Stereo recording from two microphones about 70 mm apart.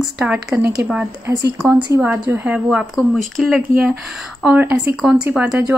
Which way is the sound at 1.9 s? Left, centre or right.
Right.